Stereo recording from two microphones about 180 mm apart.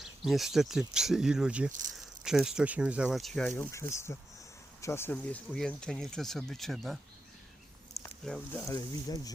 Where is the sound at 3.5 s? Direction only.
15° left (ahead or behind).